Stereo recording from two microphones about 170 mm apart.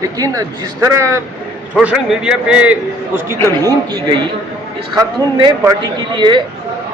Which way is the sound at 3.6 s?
25° right (ahead or behind).